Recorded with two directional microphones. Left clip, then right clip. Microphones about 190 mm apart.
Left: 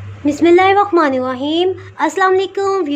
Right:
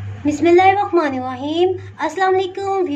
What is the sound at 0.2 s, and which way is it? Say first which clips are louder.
Speech: left 2 dB; 30° left (ahead or behind).